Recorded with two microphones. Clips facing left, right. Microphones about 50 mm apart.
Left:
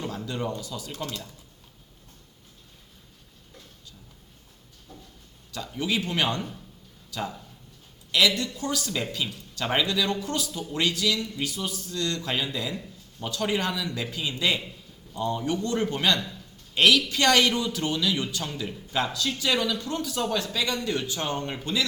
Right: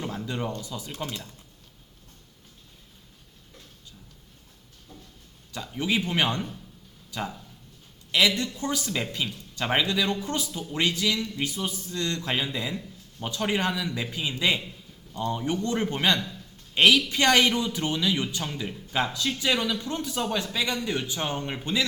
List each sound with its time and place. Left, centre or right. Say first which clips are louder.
0.0 s a man's voice: even; centre
5.5 s a man's voice: right 1 dB; centre